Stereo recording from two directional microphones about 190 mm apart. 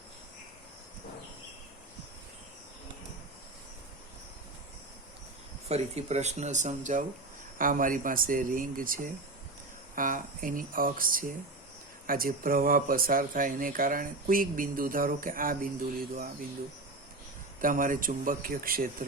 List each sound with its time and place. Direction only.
5.6 s speech: 35° right (ahead or behind)
17.6 s speech: 45° right (ahead or behind)